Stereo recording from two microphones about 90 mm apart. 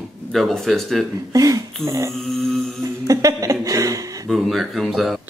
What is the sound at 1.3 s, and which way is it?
Speech, 40° right (ahead or behind).